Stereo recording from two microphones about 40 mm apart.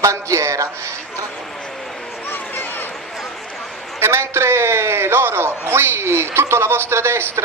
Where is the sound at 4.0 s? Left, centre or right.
Right.